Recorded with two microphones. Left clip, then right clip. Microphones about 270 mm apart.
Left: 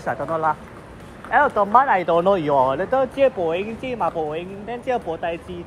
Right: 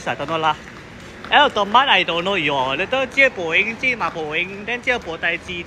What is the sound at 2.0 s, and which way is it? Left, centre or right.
Speech, centre.